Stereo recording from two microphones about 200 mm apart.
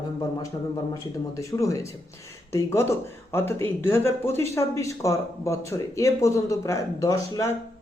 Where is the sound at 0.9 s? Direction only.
15° left (ahead or behind).